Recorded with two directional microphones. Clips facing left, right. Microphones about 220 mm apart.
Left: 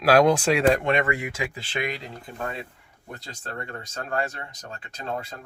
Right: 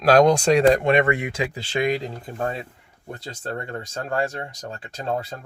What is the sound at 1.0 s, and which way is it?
Speech, 25° right (ahead or behind).